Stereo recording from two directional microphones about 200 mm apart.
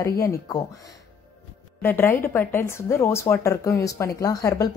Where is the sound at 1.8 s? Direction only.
10° left (ahead or behind).